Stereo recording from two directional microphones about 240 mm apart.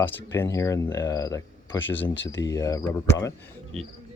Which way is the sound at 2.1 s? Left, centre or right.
Left.